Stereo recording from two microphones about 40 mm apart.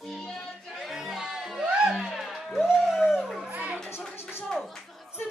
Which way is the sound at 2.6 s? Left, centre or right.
Centre.